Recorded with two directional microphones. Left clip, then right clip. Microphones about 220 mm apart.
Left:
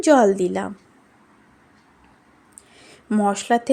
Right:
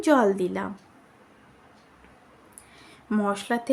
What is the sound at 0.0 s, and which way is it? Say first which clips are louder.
Speech: left 6 dB; 20° left (ahead or behind).